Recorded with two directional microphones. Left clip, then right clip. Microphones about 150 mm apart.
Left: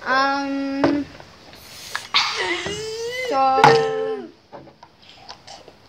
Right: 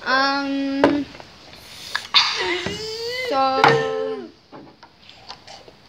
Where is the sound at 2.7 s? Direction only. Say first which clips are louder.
Even; 50° left (ahead or behind).